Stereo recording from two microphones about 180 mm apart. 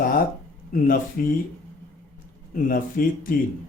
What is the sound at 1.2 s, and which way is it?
Speech, 50° left (ahead or behind).